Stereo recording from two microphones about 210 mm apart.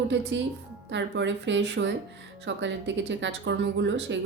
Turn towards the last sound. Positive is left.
turn(degrees=-60)  # may be behind; listen again after turning